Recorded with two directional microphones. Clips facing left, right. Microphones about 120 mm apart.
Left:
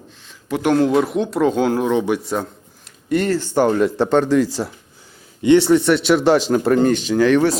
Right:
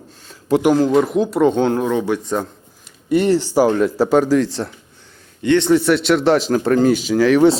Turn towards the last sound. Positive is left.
turn(degrees=0)  # may be behind; listen again after turning